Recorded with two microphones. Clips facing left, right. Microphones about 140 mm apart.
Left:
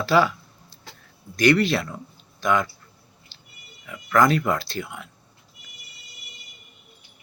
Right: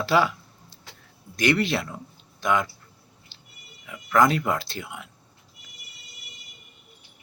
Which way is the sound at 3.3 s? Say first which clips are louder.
Even; 20° right (ahead or behind).